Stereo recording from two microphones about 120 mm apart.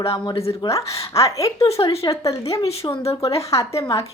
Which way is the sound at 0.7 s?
25° left (ahead or behind).